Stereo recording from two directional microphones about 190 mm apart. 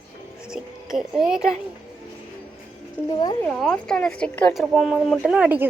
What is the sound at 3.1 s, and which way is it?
Speech, 20° left (ahead or behind).